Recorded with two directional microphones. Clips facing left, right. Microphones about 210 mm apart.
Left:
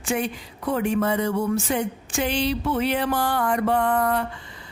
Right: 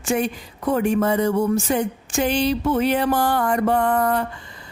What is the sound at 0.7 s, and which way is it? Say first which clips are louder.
Speech: right 3 dB; 45° right (ahead or behind).